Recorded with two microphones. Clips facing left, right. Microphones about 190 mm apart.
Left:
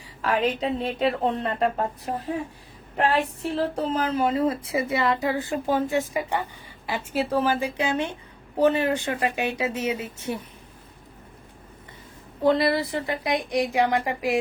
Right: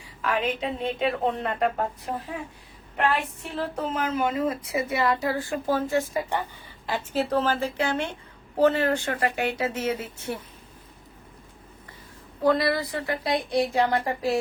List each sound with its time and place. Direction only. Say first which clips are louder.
0.2 s speech: left 3 dB; 35° left (ahead or behind)
3.0 s a woman's voice: left 3 dB; 35° left (ahead or behind); by 10.4 s 15° left (ahead or behind)
12.4 s a woman's voice: left 2 dB; 25° left (ahead or behind)